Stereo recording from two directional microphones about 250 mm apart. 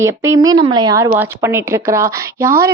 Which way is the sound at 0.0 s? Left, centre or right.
Centre.